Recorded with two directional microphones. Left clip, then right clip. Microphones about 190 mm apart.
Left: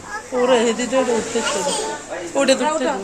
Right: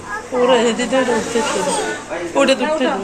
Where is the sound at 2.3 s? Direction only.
25° left (ahead or behind).